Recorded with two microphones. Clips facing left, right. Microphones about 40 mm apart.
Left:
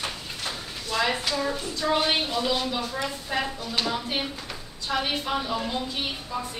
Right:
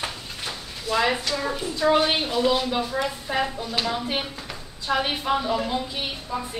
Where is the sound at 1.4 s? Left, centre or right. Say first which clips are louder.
Right 3 dB; centre.